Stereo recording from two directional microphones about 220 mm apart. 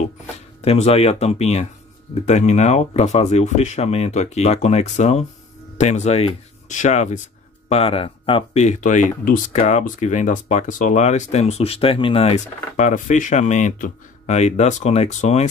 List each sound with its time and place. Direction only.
0.6 s speech: 30° left (ahead or behind)